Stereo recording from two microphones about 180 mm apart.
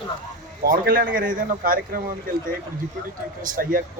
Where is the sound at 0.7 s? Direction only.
55° right (ahead or behind).